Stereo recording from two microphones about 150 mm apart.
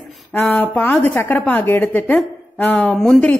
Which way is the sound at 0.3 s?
Centre (ahead or behind).